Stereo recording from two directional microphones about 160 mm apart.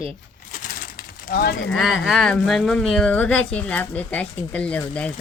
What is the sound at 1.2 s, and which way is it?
Speech, 65° left (ahead or behind).